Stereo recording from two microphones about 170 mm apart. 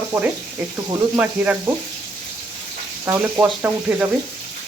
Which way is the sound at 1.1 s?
10° right (ahead or behind).